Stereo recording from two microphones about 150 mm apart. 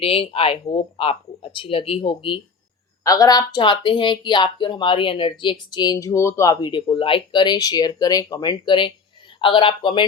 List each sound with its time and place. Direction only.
0.0 s speech: 40° left (ahead or behind)
3.0 s speech: 25° left (ahead or behind)